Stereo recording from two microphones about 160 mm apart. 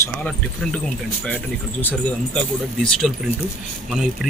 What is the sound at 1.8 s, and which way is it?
Speech, 10° left (ahead or behind).